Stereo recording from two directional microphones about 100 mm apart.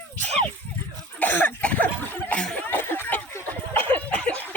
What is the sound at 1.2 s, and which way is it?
Cough, 15° left (ahead or behind).